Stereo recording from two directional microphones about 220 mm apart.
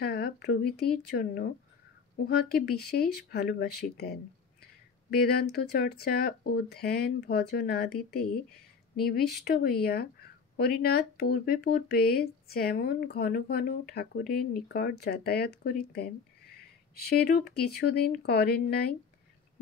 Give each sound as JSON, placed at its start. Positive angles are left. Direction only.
{"t": 0.0, "sound": "speech", "side_deg": 45}
{"t": 2.5, "sound": "speech", "side_deg": 45}